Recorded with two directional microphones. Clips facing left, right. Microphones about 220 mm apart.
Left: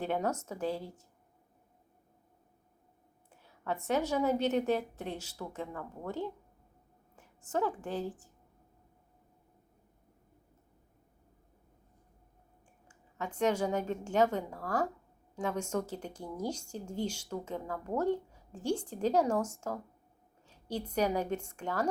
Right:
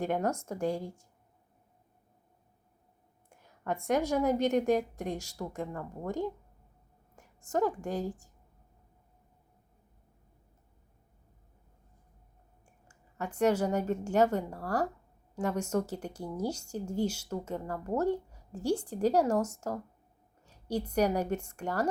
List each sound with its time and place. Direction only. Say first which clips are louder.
0.0 s a woman's voice: right 2 dB; 10° right (ahead or behind)
3.2 s a woman's voice: right 2 dB; 10° right (ahead or behind)
12.9 s a woman's voice: right 2 dB; 10° right (ahead or behind)